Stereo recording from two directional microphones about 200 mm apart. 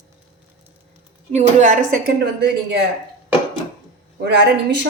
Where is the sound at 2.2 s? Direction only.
55° right (ahead or behind).